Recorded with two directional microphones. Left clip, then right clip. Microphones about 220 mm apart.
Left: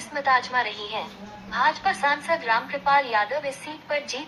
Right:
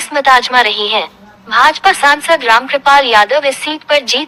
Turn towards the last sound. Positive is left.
turn(degrees=-50)  # may be behind; listen again after turning